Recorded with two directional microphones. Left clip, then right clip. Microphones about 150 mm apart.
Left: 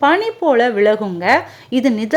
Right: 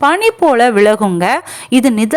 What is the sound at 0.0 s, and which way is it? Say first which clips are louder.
A woman's voice: right 4 dB; 35° right (ahead or behind).